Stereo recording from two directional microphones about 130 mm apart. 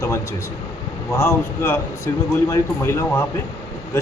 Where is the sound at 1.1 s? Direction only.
20° left (ahead or behind).